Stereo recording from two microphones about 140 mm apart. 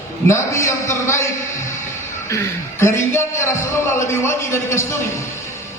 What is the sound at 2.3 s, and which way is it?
A man's voice, 20° left (ahead or behind).